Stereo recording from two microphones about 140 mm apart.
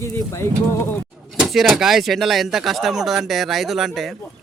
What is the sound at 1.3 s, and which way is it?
Speech, centre (ahead or behind).